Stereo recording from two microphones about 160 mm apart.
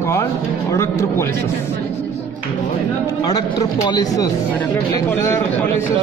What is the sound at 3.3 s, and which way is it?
Speech, 25° left (ahead or behind).